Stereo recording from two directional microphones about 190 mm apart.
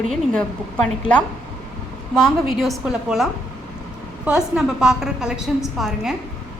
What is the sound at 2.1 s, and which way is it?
A woman's voice, centre (ahead or behind).